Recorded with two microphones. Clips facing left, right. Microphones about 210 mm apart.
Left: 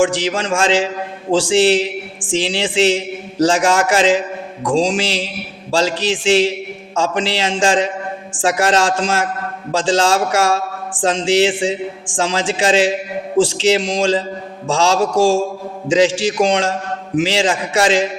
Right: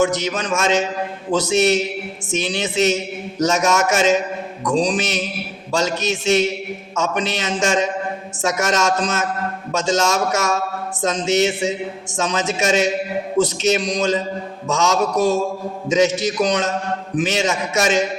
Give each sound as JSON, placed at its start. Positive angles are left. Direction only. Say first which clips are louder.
{"t": 0.3, "sound": "a man's voice", "louder": "left 3 dB", "side_deg": 30}